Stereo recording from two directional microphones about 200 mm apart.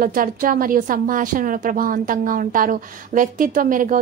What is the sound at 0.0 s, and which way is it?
A woman's voice, 45° right (ahead or behind).